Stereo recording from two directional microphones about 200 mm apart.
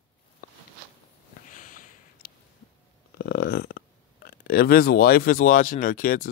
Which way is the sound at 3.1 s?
50° left (ahead or behind).